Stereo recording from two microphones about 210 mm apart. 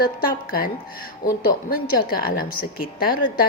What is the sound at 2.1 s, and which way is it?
Speech, 45° left (ahead or behind).